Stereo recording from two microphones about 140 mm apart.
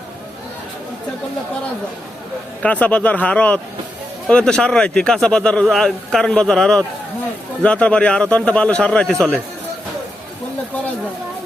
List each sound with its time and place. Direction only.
2.6 s a man's voice: 10° left (ahead or behind)